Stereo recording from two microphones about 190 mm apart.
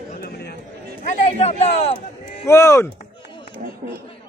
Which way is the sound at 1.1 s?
35° left (ahead or behind).